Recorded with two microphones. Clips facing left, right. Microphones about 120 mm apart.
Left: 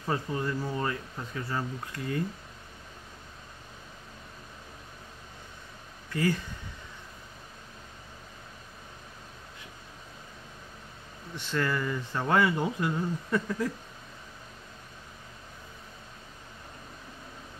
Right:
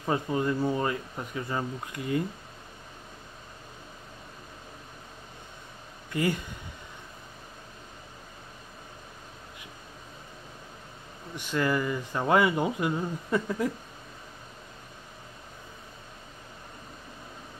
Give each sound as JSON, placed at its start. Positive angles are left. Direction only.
{"t": 0.0, "sound": "speech", "side_deg": -15}
{"t": 6.1, "sound": "speech", "side_deg": -15}
{"t": 11.3, "sound": "speech", "side_deg": -15}